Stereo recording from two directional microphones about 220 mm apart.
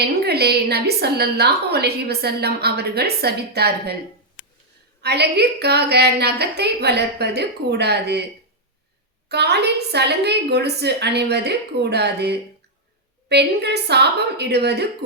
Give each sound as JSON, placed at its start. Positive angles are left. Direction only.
{"t": 0.0, "sound": "a woman's voice", "side_deg": -45}
{"t": 5.0, "sound": "a woman's voice", "side_deg": -50}
{"t": 9.3, "sound": "a woman's voice", "side_deg": -50}